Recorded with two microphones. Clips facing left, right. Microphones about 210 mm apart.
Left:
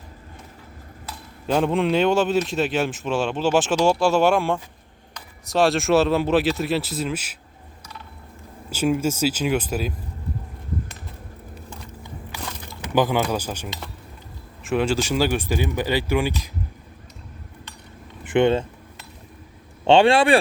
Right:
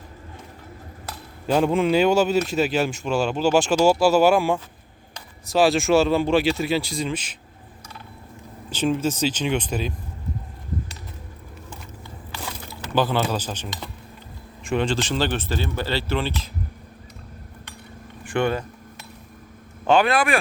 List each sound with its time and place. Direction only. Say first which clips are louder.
1.5 s speech: right 1 dB; centre (ahead or behind)
8.7 s speech: left 1 dB; 10° left (ahead or behind)
12.8 s speech: left 2 dB; 15° left (ahead or behind)
18.2 s vehicle: left 5 dB; 20° left (ahead or behind)
19.8 s speech: left 4 dB; 25° left (ahead or behind)